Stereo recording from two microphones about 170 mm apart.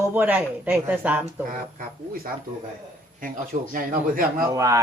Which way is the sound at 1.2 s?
50° right (ahead or behind).